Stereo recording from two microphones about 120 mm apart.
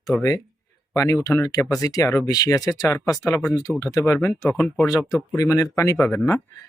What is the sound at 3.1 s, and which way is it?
Speech, 20° left (ahead or behind).